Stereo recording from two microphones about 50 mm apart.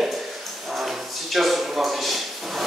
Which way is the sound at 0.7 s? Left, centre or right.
Centre.